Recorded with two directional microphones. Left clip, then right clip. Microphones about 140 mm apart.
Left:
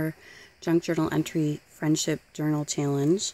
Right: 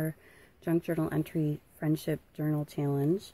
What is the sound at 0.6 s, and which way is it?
Speech, 25° left (ahead or behind).